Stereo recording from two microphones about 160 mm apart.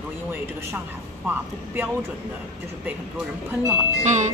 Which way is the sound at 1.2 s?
15° right (ahead or behind).